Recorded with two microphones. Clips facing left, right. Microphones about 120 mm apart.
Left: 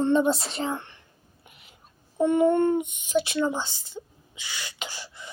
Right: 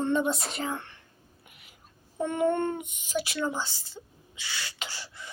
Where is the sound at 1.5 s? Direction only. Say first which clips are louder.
Left 5 dB; 25° left (ahead or behind).